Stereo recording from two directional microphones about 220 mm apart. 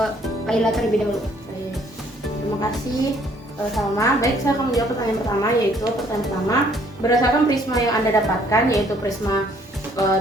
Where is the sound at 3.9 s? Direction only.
15° left (ahead or behind).